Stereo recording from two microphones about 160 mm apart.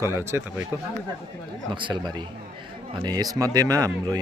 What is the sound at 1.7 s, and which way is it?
Speech, 30° right (ahead or behind).